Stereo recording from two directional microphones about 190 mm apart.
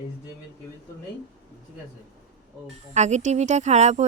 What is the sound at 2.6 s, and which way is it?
Speech, 35° right (ahead or behind).